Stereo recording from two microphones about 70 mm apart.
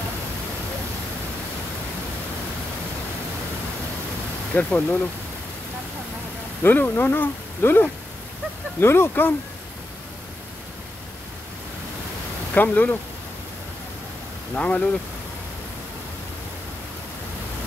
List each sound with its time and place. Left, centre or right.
4.6 s speech: left
6.6 s speech: left
12.6 s speech: centre
14.5 s speech: centre